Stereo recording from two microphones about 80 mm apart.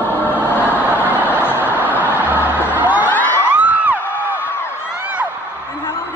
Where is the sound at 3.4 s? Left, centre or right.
Centre.